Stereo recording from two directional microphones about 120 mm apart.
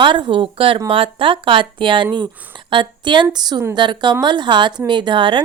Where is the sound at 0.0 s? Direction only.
40° right (ahead or behind).